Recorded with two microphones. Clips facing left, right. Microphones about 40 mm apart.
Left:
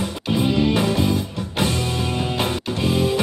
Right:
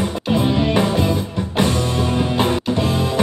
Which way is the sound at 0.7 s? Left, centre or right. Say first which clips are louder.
Right 3 dB; right.